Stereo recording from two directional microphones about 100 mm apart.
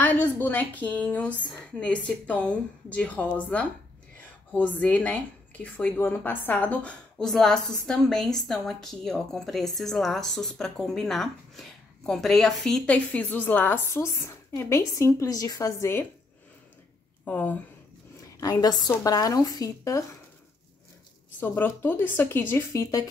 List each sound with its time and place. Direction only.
0.0 s speech: 15° left (ahead or behind)
17.2 s speech: 15° left (ahead or behind)
18.4 s speech: 40° left (ahead or behind)
21.4 s speech: 20° left (ahead or behind)